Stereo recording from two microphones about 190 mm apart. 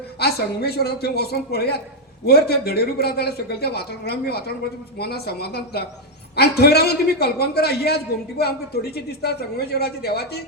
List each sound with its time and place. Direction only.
0.2 s a man's voice: 55° left (ahead or behind)